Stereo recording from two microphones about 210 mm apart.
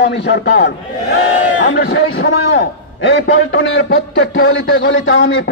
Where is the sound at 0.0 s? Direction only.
55° left (ahead or behind).